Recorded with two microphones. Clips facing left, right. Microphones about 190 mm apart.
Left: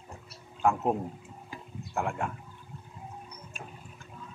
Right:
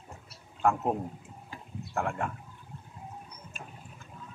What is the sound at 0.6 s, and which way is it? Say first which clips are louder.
Speech: left 1 dB; 5° left (ahead or behind).